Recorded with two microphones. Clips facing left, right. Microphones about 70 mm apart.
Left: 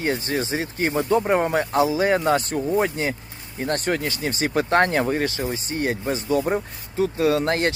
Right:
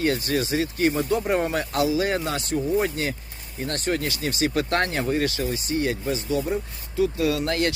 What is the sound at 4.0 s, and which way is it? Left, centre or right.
Speech, left.